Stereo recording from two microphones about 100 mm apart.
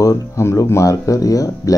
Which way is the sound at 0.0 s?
30° left (ahead or behind).